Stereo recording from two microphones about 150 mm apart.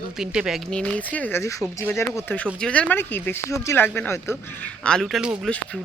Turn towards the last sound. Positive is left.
turn(degrees=0)  # may be behind; listen again after turning